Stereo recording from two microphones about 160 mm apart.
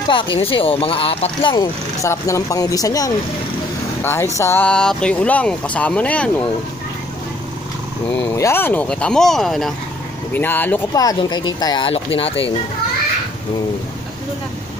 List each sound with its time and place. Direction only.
0.4 s speech: 35° left (ahead or behind); by 6.3 s 10° left (ahead or behind)
8.2 s speech: 15° left (ahead or behind)
10.3 s speech: 10° left (ahead or behind)
10.9 s speech: 20° left (ahead or behind)